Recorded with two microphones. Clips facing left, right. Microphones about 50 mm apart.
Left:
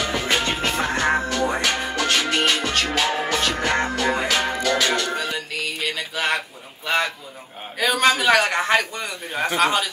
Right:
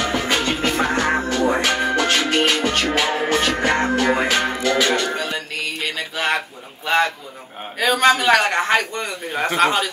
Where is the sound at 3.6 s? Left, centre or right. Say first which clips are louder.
Right 3 dB; centre.